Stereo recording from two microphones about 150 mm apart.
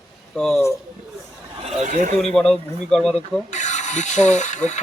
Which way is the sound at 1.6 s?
55° right (ahead or behind).